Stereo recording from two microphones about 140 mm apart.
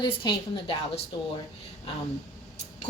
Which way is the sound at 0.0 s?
35° left (ahead or behind).